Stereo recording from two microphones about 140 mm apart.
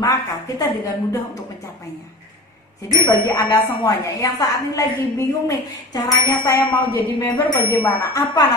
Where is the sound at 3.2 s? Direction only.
30° left (ahead or behind).